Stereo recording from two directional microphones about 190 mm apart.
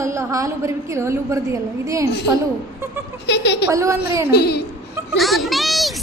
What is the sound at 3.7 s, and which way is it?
Speech, 15° right (ahead or behind).